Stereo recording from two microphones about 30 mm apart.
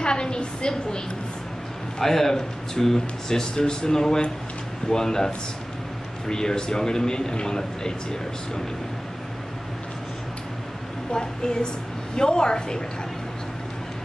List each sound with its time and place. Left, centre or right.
0.0 s a sound: left
2.0 s speech: centre
11.1 s speech: left